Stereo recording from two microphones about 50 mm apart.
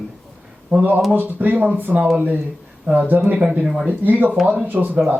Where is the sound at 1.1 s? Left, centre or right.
Right.